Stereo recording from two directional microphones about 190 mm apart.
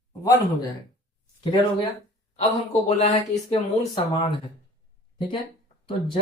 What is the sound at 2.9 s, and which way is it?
Speech, 35° left (ahead or behind).